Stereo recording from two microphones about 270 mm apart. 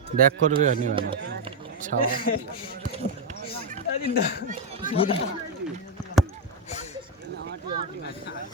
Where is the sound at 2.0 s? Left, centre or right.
Left.